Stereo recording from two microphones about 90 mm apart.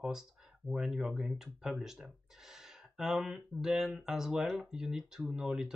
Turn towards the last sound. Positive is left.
turn(degrees=-5)  # may be behind; listen again after turning